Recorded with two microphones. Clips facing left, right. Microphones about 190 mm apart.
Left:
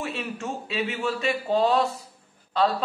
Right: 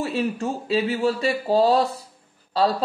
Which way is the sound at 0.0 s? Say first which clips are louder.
Right 7 dB; 35° right (ahead or behind).